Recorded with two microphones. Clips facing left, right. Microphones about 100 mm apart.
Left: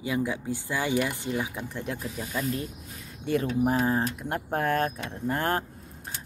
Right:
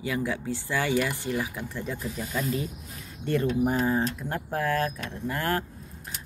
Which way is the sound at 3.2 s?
5° left (ahead or behind).